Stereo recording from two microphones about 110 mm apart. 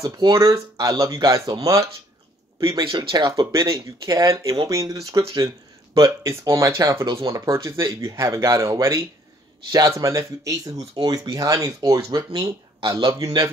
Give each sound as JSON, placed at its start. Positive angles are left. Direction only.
{"t": 0.0, "sound": "speech", "side_deg": -30}
{"t": 3.0, "sound": "speech", "side_deg": -35}